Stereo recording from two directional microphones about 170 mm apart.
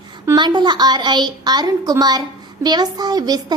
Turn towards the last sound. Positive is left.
turn(degrees=-25)  # may be behind; listen again after turning